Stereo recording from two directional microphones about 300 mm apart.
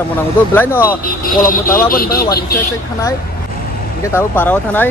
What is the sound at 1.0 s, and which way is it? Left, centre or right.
Speech, left.